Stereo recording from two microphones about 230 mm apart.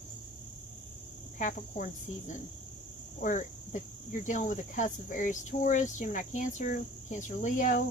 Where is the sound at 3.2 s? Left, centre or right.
Left.